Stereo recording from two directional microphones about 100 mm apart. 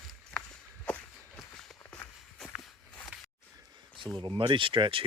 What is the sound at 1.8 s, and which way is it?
Walk, 25° left (ahead or behind).